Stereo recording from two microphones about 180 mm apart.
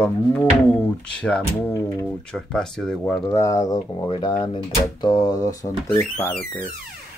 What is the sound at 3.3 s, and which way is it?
Speech, 15° left (ahead or behind).